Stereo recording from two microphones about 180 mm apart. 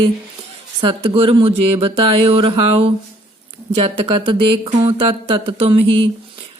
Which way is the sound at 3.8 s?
30° right (ahead or behind).